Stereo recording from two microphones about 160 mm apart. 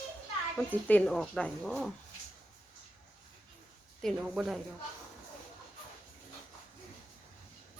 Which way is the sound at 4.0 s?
Centre (ahead or behind).